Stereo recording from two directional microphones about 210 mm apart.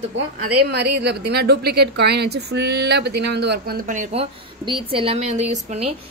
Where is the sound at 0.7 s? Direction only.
50° right (ahead or behind).